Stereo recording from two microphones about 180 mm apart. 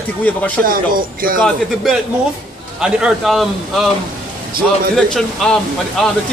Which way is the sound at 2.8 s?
5° right (ahead or behind).